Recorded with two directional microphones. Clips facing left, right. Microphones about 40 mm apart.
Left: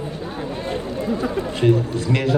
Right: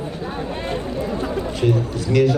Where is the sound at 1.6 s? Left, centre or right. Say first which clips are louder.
Left 3 dB; left.